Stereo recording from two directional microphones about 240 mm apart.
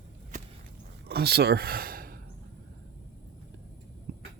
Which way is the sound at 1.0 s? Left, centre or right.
Right.